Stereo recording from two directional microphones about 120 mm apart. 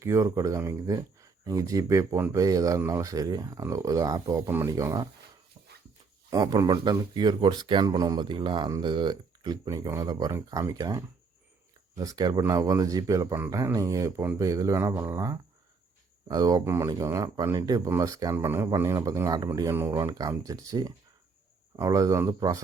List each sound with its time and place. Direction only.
0.0 s speech: 25° right (ahead or behind)
6.3 s speech: 30° right (ahead or behind)